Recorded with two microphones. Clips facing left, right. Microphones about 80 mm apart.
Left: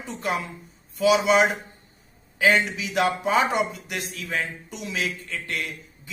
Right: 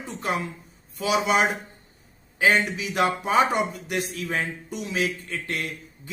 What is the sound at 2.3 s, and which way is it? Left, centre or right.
A man's voice, right.